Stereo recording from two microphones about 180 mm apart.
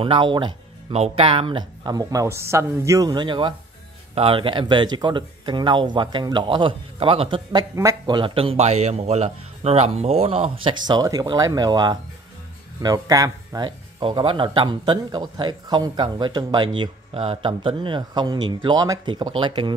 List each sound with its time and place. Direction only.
0.0 s speech: 30° right (ahead or behind)
7.7 s speech: 15° right (ahead or behind)
8.2 s speech: 30° right (ahead or behind)